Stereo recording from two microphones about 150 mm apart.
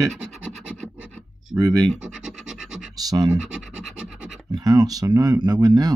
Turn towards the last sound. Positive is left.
turn(degrees=-25)  # may be behind; listen again after turning